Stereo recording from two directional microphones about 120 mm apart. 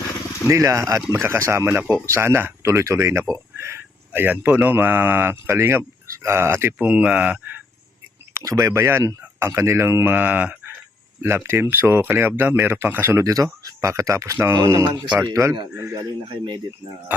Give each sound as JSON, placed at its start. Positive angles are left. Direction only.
{"t": 0.4, "sound": "speech", "side_deg": -25}
{"t": 1.8, "sound": "speech", "side_deg": -10}
{"t": 2.0, "sound": "speech", "side_deg": -20}
{"t": 8.3, "sound": "speech", "side_deg": -25}